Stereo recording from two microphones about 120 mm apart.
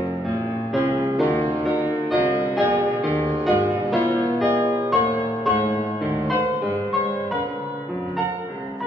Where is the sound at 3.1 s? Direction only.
15° left (ahead or behind).